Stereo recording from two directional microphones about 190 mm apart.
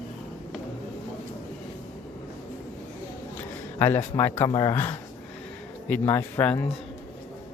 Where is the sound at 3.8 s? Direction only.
10° left (ahead or behind).